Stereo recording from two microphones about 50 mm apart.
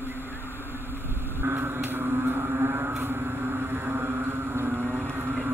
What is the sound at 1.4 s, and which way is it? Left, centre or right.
Vehicle, right.